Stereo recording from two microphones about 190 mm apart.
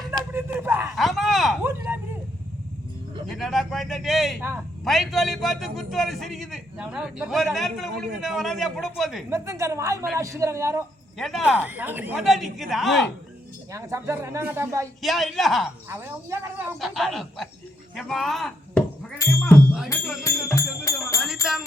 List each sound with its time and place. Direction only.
0.1 s a sound: 15° right (ahead or behind)
0.9 s a sound: centre (ahead or behind)
3.3 s a man's voice: centre (ahead or behind)
9.3 s speech: 15° right (ahead or behind)
11.2 s a man's voice: centre (ahead or behind)
13.7 s speech: 15° right (ahead or behind)
15.0 s a man's voice: centre (ahead or behind)
15.9 s speech: 10° right (ahead or behind)
16.8 s a man's voice: centre (ahead or behind)
19.2 s speech: 15° left (ahead or behind)
20.2 s music: 15° left (ahead or behind)
21.5 s jingle bell: centre (ahead or behind)